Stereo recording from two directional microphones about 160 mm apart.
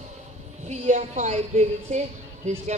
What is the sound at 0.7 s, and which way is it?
A woman's voice, 45° right (ahead or behind).